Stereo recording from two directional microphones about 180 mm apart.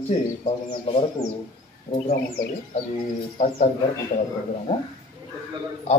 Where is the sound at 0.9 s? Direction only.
30° left (ahead or behind).